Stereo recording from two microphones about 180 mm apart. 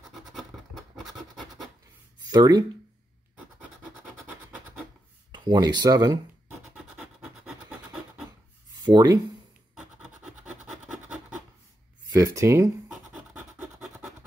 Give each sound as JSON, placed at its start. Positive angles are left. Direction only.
{"t": 0.0, "sound": "scratch", "side_deg": 0}
{"t": 2.3, "sound": "speech", "side_deg": -25}
{"t": 5.3, "sound": "speech", "side_deg": -25}
{"t": 8.8, "sound": "speech", "side_deg": -20}
{"t": 12.1, "sound": "speech", "side_deg": -15}
{"t": 13.1, "sound": "scratch", "side_deg": -10}